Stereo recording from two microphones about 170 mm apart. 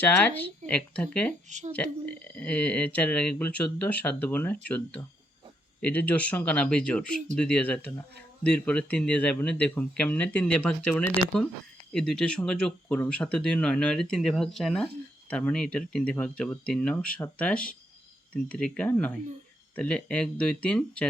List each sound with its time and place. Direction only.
0.0 s speech: 10° left (ahead or behind)
1.5 s speech: 45° right (ahead or behind)
1.7 s speech: 10° left (ahead or behind)